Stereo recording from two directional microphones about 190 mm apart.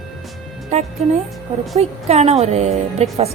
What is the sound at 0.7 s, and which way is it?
A woman's voice, 35° right (ahead or behind).